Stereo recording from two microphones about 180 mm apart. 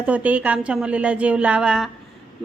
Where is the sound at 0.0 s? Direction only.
10° right (ahead or behind).